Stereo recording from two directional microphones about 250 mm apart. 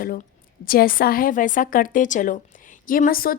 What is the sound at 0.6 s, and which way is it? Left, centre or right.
A woman's voice, left.